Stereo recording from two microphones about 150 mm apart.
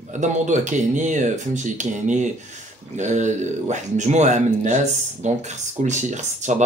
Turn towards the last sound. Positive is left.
turn(degrees=-55)  # may be behind; listen again after turning